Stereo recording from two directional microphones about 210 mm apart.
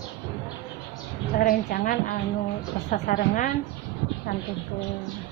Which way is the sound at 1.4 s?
40° left (ahead or behind).